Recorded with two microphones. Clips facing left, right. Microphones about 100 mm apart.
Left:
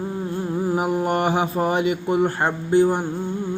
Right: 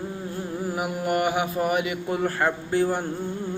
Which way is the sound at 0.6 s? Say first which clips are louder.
Left 6 dB; 25° left (ahead or behind).